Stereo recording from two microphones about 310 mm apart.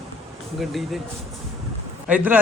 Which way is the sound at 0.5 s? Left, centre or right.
Centre.